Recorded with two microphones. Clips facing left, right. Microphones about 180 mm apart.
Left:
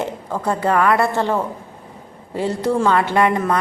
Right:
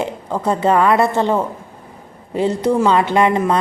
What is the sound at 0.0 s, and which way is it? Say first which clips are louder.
A woman's voice: right 2 dB; 20° right (ahead or behind).